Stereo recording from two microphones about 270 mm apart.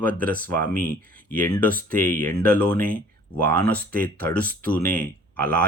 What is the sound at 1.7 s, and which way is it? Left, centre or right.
Speech, right.